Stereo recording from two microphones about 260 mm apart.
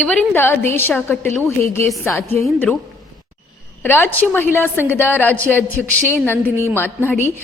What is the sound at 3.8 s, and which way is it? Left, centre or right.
A woman's voice, centre.